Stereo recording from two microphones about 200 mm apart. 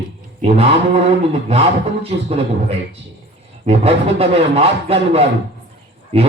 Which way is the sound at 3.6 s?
30° right (ahead or behind).